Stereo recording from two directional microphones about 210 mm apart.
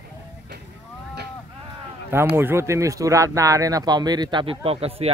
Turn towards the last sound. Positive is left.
turn(degrees=-30)  # may be behind; listen again after turning